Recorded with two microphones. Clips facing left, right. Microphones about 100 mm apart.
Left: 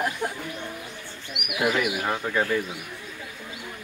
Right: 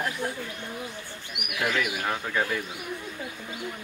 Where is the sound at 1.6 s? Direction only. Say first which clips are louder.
Left 3 dB; 10° left (ahead or behind).